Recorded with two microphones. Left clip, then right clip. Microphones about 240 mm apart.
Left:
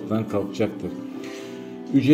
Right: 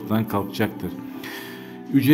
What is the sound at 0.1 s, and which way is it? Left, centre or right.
A man's voice, right.